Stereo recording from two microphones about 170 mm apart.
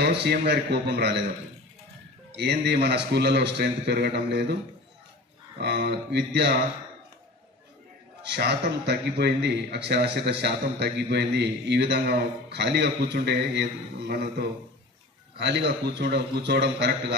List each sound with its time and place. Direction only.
0.0 s a man's voice: 80° right
2.3 s a man's voice: 80° right
5.6 s a man's voice: 80° right
8.2 s a man's voice: 80° right